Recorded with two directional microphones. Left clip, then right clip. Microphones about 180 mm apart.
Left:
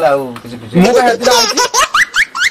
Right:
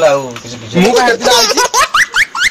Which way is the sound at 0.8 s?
Centre (ahead or behind).